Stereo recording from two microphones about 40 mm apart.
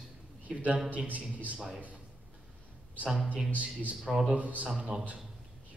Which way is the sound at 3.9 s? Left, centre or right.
Centre.